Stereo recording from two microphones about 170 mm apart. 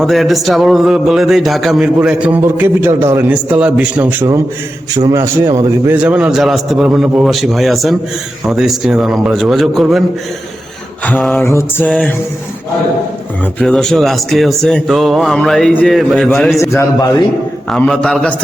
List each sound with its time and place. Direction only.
0.0 s a man's voice: centre (ahead or behind)
11.0 s a man's voice: 5° left (ahead or behind)
11.4 s a man's voice: 15° left (ahead or behind)
11.9 s a man's voice: 5° left (ahead or behind)
13.4 s a man's voice: 5° left (ahead or behind)
16.6 s a man's voice: 15° left (ahead or behind)
17.7 s a man's voice: 5° left (ahead or behind)